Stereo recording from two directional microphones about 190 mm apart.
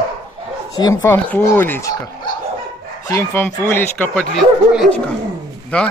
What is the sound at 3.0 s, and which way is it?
Speech, 15° left (ahead or behind).